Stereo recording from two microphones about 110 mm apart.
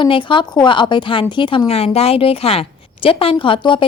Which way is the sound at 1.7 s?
65° left (ahead or behind).